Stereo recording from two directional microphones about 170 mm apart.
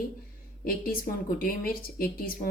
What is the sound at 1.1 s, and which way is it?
Speech, 55° left (ahead or behind).